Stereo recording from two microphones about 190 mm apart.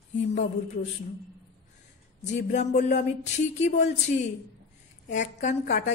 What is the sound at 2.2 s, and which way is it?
Speech, 40° left (ahead or behind).